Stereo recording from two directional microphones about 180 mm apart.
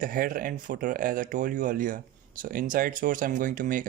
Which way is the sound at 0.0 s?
50° right (ahead or behind).